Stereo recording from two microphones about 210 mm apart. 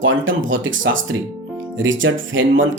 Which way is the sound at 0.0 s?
65° right (ahead or behind).